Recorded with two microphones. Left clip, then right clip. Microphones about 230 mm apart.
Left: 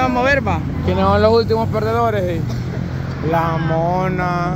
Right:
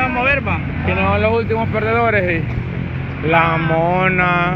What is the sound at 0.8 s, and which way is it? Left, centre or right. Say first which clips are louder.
Speech: left 2 dB; left.